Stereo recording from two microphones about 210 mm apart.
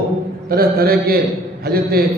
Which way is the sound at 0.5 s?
45° right (ahead or behind).